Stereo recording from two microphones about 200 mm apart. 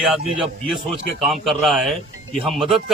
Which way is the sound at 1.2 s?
Centre (ahead or behind).